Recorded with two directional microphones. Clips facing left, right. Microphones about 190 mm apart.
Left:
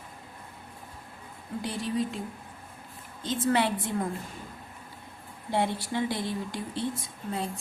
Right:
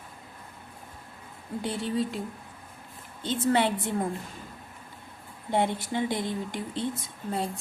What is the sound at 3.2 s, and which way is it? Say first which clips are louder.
Speech: right 1 dB; 30° right (ahead or behind).